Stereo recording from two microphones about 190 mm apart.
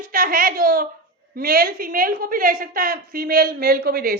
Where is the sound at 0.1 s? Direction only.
50° right (ahead or behind).